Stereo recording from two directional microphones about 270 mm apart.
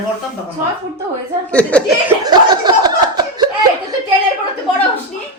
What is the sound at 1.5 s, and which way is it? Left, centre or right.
Speech, centre.